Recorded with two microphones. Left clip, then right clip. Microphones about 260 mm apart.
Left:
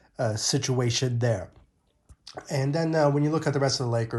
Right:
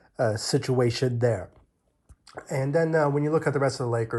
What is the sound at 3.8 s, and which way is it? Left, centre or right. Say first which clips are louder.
Speech: right 1 dB; left.